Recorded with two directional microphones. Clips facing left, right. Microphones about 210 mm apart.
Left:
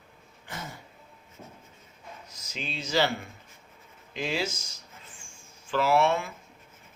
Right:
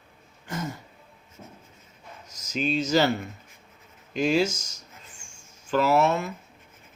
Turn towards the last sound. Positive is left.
turn(degrees=-40)  # may be behind; listen again after turning